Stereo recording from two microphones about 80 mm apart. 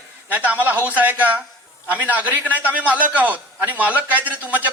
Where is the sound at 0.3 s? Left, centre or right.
Right.